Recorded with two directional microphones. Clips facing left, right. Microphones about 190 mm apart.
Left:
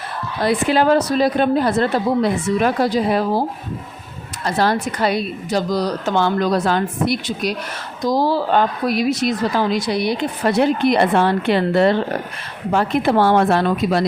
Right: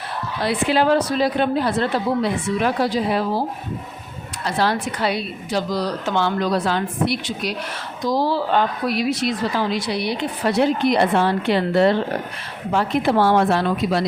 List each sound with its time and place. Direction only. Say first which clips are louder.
0.4 s a woman's voice: left 3 dB; 45° left (ahead or behind)
4.4 s a woman's voice: left 3 dB; 45° left (ahead or behind)